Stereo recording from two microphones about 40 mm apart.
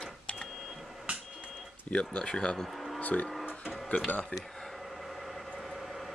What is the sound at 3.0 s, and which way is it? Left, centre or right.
Speech, left.